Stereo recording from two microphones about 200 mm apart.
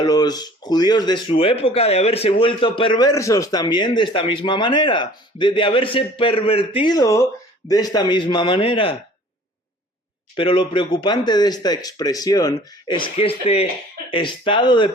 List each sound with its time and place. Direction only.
0.0 s speech: 20° left (ahead or behind)
10.3 s speech: 25° left (ahead or behind)